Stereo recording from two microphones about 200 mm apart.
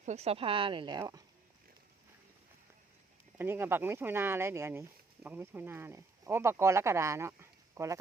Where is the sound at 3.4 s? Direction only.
10° right (ahead or behind).